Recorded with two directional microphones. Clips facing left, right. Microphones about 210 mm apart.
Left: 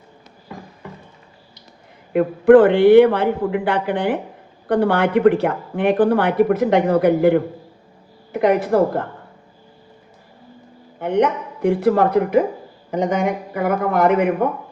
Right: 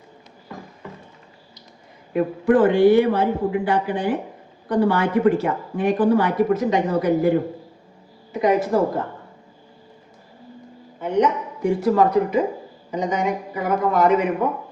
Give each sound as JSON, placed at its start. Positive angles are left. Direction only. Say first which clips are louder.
{"t": 2.1, "sound": "a woman's voice", "louder": "left 7 dB", "side_deg": 60}
{"t": 11.0, "sound": "a woman's voice", "louder": "left 2 dB", "side_deg": 60}